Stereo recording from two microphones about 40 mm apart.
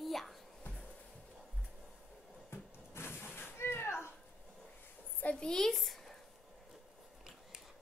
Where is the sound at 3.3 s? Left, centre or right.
Left.